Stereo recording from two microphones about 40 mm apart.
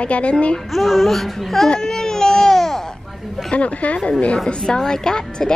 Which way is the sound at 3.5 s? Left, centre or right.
Left.